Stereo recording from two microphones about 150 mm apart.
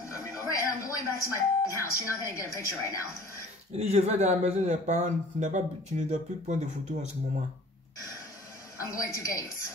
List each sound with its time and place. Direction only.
0.1 s a sound: 20° left (ahead or behind)
3.7 s speech: 45° right (ahead or behind)
8.7 s a man's voice: 20° left (ahead or behind)